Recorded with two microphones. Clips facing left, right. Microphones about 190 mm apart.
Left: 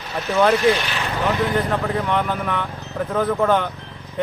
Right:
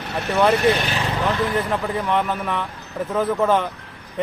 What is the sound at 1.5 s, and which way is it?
Speech, 5° right (ahead or behind).